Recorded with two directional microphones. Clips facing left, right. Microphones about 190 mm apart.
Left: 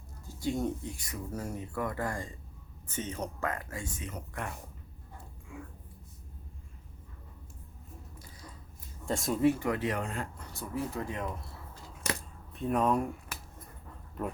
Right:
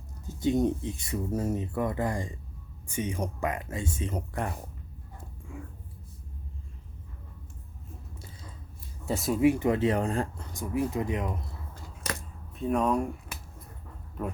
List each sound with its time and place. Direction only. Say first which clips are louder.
0.3 s speech: right 7 dB; 20° right (ahead or behind)
9.0 s speech: right 3 dB; 5° right (ahead or behind)
9.5 s speech: right 5 dB; 20° right (ahead or behind)
10.5 s speech: right 6 dB; 15° right (ahead or behind)
12.5 s speech: right 2 dB; centre (ahead or behind)